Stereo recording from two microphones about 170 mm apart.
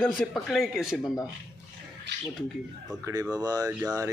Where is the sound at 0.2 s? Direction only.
Centre (ahead or behind).